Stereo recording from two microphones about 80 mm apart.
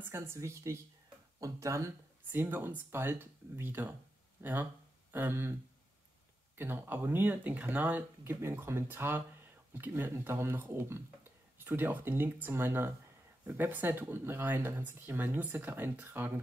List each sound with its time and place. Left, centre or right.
0.0 s speech: right
2.3 s speech: right